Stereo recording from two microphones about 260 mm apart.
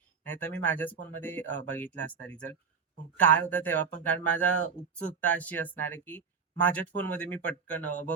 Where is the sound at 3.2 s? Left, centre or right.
Centre.